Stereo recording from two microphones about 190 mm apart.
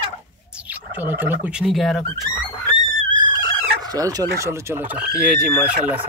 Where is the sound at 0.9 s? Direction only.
10° right (ahead or behind).